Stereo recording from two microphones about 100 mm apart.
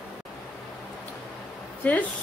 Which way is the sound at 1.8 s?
15° left (ahead or behind).